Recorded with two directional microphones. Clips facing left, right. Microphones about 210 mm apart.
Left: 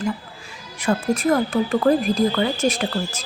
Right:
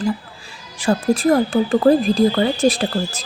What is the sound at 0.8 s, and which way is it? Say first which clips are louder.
Speech: right 3 dB; 30° right (ahead or behind).